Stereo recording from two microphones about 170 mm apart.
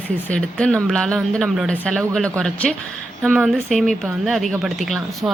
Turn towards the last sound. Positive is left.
turn(degrees=0)  # may be behind; listen again after turning